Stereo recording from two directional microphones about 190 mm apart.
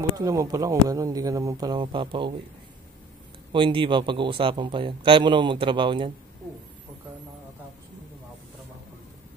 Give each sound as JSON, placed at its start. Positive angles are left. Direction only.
{"t": 0.1, "sound": "speech", "side_deg": -20}
{"t": 3.5, "sound": "speech", "side_deg": -25}